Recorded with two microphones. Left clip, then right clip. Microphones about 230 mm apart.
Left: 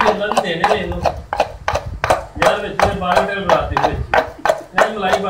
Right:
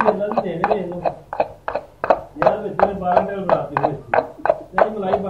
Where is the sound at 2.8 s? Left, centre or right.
Left.